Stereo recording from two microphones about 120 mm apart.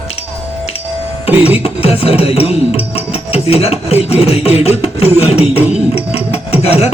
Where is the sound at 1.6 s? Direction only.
55° left (ahead or behind).